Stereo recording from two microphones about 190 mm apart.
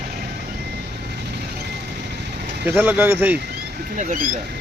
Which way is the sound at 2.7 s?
10° right (ahead or behind).